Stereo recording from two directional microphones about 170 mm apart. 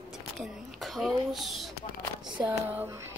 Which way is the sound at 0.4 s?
Centre (ahead or behind).